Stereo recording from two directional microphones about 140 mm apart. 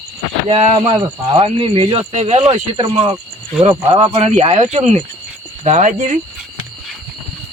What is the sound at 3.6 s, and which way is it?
Speech, 35° right (ahead or behind).